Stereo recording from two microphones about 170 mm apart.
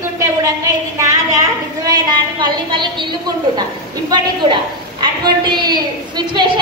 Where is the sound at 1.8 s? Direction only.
25° right (ahead or behind).